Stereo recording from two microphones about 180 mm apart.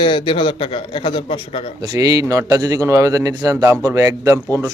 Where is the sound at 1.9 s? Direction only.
20° right (ahead or behind).